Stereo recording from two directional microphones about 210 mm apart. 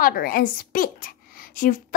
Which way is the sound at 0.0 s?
45° left (ahead or behind).